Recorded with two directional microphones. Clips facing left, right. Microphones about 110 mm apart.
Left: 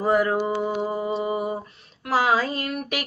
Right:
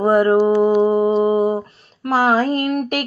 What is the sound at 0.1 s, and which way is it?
Mantra, 60° right (ahead or behind).